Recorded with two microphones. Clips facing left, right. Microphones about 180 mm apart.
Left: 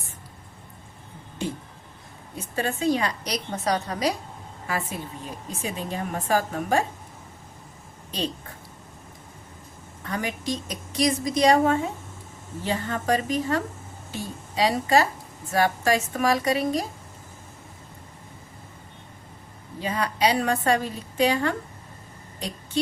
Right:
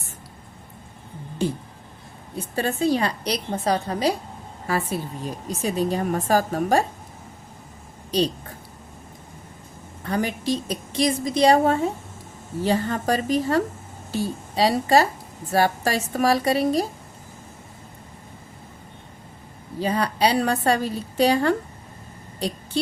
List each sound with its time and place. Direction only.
2.4 s a woman's voice: 35° right (ahead or behind)
8.1 s a woman's voice: 35° right (ahead or behind)
10.0 s a woman's voice: 35° right (ahead or behind)
19.8 s a woman's voice: 35° right (ahead or behind)
22.4 s a sound: 35° right (ahead or behind)